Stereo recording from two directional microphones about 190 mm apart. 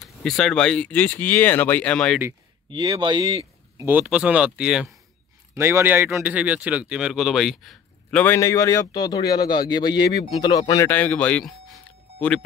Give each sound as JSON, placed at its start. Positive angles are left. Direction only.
{"t": 0.0, "sound": "speech", "side_deg": 0}
{"t": 2.7, "sound": "speech", "side_deg": -25}
{"t": 5.5, "sound": "speech", "side_deg": -15}